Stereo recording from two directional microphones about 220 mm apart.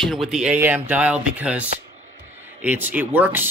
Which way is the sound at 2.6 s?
10° right (ahead or behind).